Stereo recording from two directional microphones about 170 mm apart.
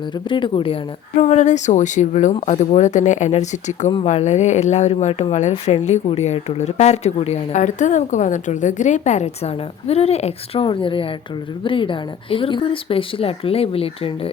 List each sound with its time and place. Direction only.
0.3 s a woman's voice: 30° left (ahead or behind)